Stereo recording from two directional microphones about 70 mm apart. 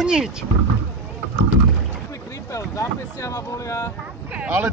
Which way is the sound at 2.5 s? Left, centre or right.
Left.